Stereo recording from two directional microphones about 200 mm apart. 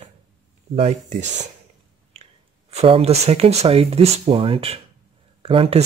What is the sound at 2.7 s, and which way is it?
Speech, 30° right (ahead or behind).